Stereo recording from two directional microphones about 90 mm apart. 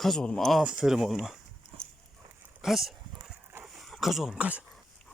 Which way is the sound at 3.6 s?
Centre (ahead or behind).